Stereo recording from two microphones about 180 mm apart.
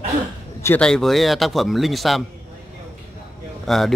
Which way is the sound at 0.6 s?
5° left (ahead or behind).